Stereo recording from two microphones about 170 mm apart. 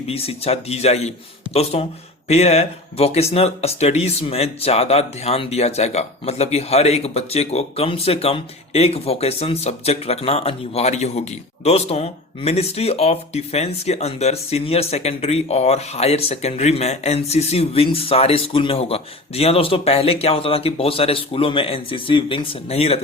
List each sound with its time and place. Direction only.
0.1 s speech: 35° left (ahead or behind)